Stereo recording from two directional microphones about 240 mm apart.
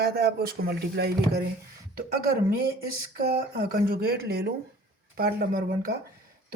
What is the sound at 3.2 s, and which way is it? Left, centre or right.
Speech, right.